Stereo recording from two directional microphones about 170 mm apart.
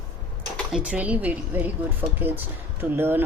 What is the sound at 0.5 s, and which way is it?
Speech, 5° right (ahead or behind).